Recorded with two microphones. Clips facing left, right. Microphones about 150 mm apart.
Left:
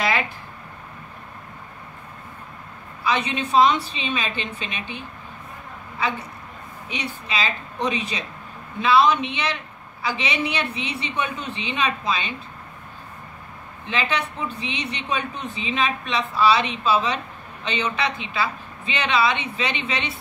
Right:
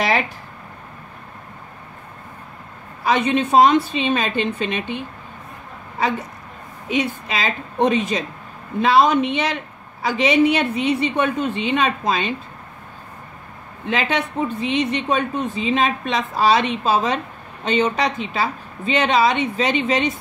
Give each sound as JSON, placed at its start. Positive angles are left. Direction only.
{"t": 3.0, "sound": "speech", "side_deg": -50}
{"t": 6.9, "sound": "speech", "side_deg": -50}
{"t": 13.8, "sound": "speech", "side_deg": -50}